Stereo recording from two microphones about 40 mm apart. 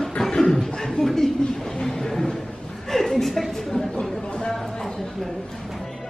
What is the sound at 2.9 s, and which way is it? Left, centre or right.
Chuckle, centre.